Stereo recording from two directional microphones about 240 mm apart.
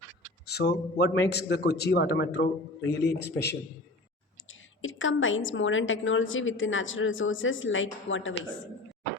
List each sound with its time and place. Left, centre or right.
0.4 s a woman's voice: left
4.8 s a woman's voice: left